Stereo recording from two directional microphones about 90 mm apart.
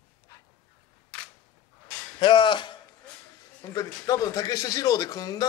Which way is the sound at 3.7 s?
40° left (ahead or behind).